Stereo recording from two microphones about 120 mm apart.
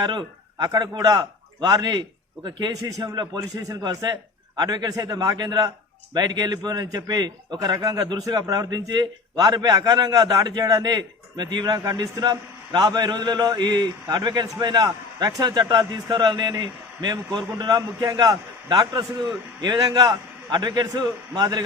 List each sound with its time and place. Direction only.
0.0 s a man's voice: 40° right (ahead or behind)